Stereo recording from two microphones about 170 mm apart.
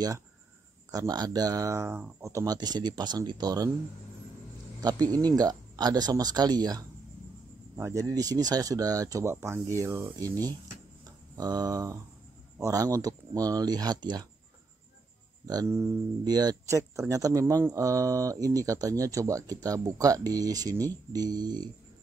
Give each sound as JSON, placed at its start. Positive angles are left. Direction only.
{"t": 0.9, "sound": "speech", "side_deg": -20}
{"t": 4.8, "sound": "speech", "side_deg": -25}
{"t": 15.4, "sound": "speech", "side_deg": -20}